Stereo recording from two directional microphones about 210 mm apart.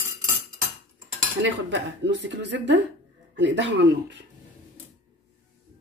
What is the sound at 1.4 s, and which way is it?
Speech, 55° right (ahead or behind).